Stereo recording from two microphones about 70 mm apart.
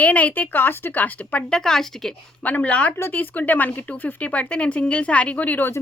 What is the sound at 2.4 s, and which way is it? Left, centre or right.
Speech, left.